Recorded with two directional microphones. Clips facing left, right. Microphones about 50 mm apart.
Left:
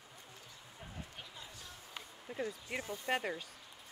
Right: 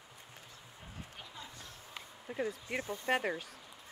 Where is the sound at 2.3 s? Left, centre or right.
Centre.